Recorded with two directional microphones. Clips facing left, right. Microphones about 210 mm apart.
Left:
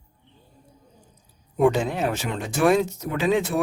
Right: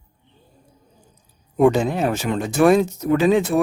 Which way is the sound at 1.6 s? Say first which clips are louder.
Right 4 dB; 40° right (ahead or behind).